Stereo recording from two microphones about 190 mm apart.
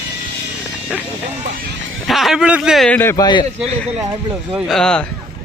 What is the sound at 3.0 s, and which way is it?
Speech, 15° left (ahead or behind).